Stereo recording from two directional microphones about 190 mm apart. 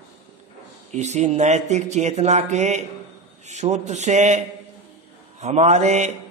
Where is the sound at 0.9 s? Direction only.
35° right (ahead or behind).